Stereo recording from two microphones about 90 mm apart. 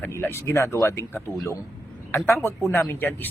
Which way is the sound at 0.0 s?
25° left (ahead or behind).